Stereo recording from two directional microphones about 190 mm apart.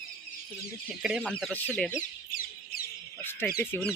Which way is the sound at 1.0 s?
Centre (ahead or behind).